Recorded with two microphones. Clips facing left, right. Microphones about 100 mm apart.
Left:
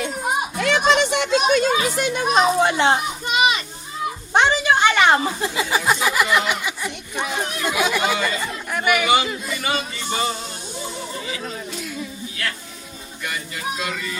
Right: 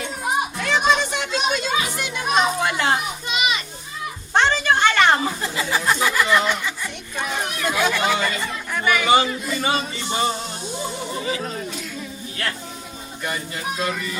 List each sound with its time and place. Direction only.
0.6 s a child's voice: 75° left (ahead or behind); by 3.0 s 25° left (ahead or behind)
4.4 s a woman's voice: 15° left (ahead or behind)
9.0 s speech: 30° right (ahead or behind)
13.2 s speech: 30° right (ahead or behind)